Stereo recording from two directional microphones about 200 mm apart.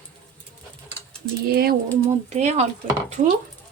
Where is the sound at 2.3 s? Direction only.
35° right (ahead or behind).